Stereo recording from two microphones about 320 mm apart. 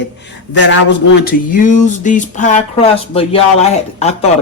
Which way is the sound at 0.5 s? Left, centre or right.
Left.